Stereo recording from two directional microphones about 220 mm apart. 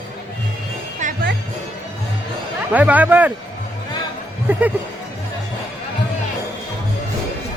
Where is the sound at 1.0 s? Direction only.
35° right (ahead or behind).